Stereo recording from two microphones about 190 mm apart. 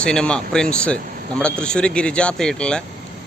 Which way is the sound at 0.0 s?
5° left (ahead or behind).